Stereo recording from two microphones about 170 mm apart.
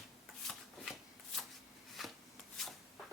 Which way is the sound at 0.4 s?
Centre (ahead or behind).